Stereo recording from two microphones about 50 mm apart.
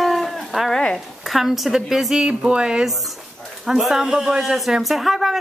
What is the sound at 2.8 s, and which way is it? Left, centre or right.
A man's voice, centre.